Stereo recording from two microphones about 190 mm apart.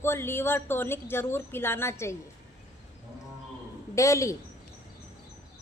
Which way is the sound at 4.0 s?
15° left (ahead or behind).